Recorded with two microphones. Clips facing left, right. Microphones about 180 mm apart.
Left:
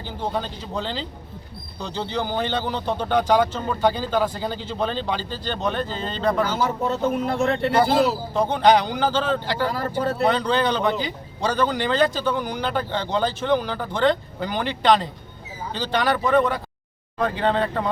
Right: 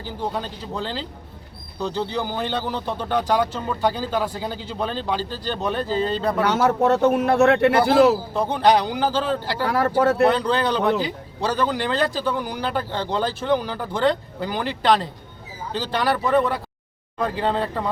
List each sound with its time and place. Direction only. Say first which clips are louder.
0.0 s speech: even; 5° right (ahead or behind)
6.4 s speech: right 4 dB; 70° right (ahead or behind)
8.3 s speech: left 1 dB; centre (ahead or behind)
9.6 s speech: right 9 dB; 75° right (ahead or behind)
10.2 s speech: right 1 dB; 5° right (ahead or behind)